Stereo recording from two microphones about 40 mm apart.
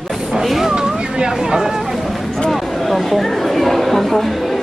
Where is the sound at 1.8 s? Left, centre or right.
Centre.